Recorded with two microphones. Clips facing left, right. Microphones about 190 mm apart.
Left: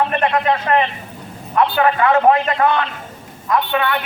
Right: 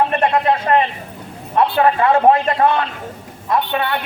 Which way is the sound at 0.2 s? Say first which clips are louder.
Right 1 dB; 30° right (ahead or behind).